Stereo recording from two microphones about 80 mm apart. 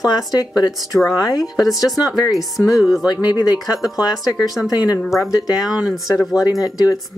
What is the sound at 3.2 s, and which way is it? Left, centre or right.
Speech, left.